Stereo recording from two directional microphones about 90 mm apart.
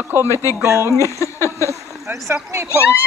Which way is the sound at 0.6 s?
30° right (ahead or behind).